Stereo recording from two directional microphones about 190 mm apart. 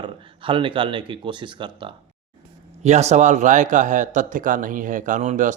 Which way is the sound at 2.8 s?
35° right (ahead or behind).